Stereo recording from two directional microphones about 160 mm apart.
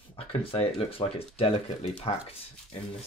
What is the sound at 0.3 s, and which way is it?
Speech, 35° left (ahead or behind).